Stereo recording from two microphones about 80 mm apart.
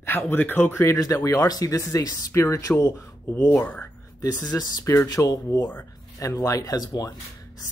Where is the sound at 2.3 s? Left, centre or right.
Left.